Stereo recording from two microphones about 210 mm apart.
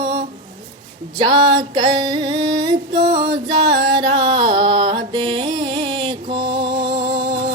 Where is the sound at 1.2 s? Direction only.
20° right (ahead or behind).